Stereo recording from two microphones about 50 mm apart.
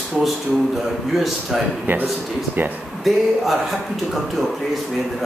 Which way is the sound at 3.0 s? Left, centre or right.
Centre.